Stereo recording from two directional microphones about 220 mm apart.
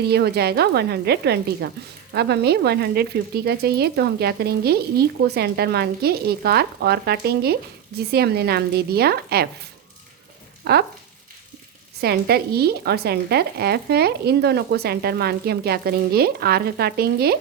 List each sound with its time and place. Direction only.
0.0 s a woman's voice: 45° right (ahead or behind)
10.6 s frying: 45° right (ahead or behind)
11.9 s a woman's voice: 45° right (ahead or behind)